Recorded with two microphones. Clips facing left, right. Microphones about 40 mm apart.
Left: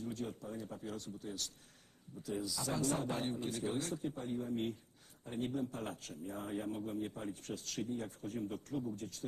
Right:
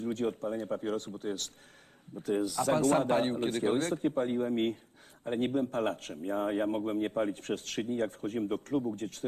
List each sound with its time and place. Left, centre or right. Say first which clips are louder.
0.0 s a man's voice: right 10 dB; right